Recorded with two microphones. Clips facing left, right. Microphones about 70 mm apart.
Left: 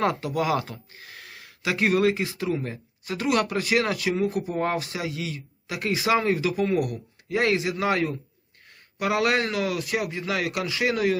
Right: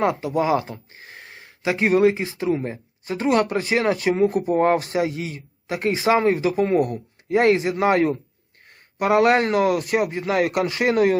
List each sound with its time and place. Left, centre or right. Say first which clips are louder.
0.0 s speech: right 4 dB; centre; by 11.2 s right